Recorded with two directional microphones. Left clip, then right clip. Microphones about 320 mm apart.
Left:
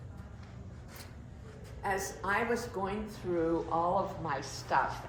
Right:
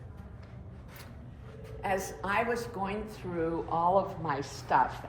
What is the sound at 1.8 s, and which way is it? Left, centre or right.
A woman's voice, right.